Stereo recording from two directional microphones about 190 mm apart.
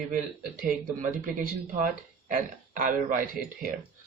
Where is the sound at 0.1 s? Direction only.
45° right (ahead or behind).